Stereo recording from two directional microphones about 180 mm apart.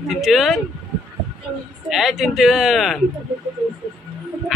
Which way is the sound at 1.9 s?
Centre (ahead or behind).